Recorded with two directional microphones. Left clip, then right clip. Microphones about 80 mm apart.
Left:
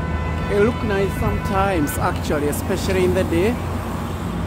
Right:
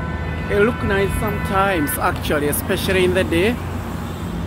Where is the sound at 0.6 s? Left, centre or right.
Centre.